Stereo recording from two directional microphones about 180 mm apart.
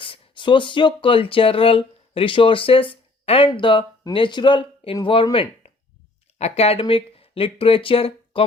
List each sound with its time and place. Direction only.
0.0 s speech: 30° left (ahead or behind)